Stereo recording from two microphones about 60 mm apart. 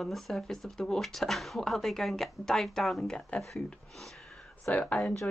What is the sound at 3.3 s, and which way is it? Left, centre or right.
Speech, left.